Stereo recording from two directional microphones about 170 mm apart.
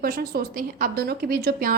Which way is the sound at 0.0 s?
60° right (ahead or behind).